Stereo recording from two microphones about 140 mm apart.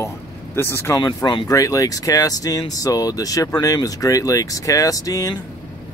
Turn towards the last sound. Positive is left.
turn(degrees=25)  # may be behind; listen again after turning